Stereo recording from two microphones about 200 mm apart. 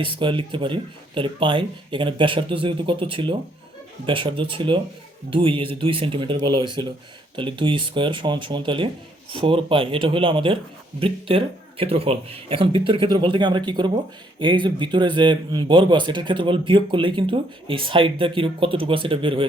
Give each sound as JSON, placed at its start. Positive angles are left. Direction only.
{"t": 0.0, "sound": "speech", "side_deg": -25}